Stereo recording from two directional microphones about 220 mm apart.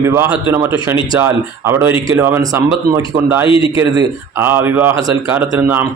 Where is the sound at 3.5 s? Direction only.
25° left (ahead or behind).